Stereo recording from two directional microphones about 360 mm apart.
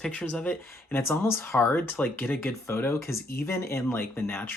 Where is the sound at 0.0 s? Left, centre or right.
Centre.